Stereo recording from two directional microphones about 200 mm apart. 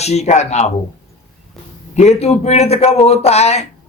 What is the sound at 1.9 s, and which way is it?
Speech, 35° left (ahead or behind).